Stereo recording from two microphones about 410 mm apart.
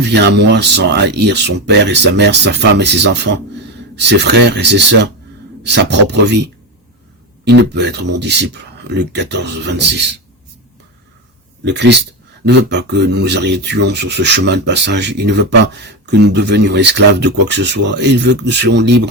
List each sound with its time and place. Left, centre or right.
0.0 s rub: right
7.4 s rub: right
11.6 s rub: right